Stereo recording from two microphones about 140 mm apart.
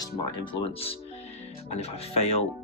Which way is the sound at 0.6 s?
45° left (ahead or behind).